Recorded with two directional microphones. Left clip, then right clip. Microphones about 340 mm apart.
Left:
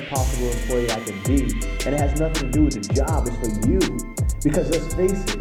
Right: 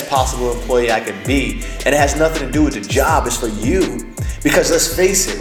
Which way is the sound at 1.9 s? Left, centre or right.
Centre.